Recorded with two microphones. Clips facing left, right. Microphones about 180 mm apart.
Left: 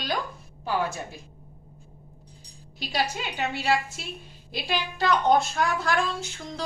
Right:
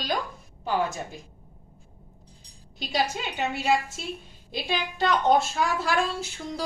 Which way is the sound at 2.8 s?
Centre (ahead or behind).